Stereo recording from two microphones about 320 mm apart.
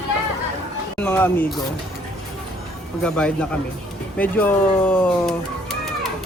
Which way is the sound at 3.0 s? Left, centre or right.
Centre.